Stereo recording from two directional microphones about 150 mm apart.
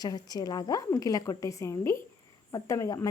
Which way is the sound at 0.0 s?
25° left (ahead or behind).